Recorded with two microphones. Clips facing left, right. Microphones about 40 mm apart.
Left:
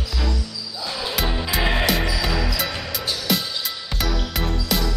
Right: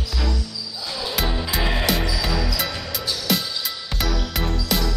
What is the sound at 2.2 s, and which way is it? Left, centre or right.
Music, centre.